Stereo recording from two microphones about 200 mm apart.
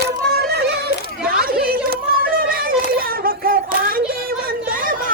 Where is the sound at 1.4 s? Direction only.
50° right (ahead or behind).